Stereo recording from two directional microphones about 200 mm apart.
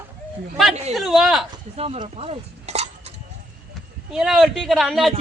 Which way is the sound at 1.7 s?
30° right (ahead or behind).